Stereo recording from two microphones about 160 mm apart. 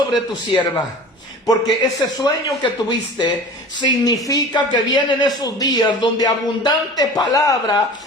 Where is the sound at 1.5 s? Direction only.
25° left (ahead or behind).